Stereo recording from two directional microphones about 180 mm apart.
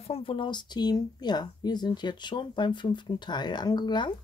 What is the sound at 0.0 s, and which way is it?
Speech, 30° left (ahead or behind).